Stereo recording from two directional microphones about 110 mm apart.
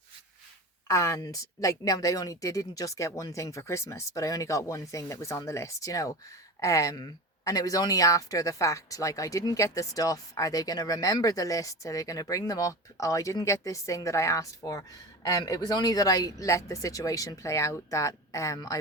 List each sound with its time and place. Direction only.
0.9 s speech: 30° left (ahead or behind)